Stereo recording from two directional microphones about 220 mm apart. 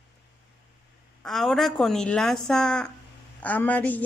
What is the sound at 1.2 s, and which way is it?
A woman's voice, centre (ahead or behind).